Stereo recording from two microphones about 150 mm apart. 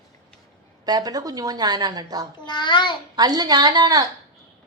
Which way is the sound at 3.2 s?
25° right (ahead or behind).